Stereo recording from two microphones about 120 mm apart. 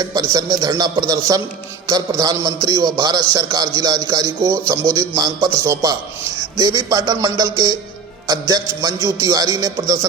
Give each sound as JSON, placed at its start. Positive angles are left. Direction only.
{"t": 0.0, "sound": "a man's voice", "side_deg": -30}